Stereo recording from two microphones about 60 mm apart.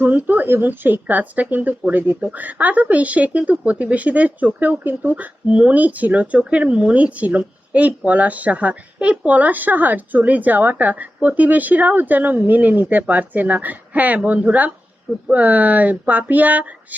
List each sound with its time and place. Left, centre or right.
0.0 s speech: right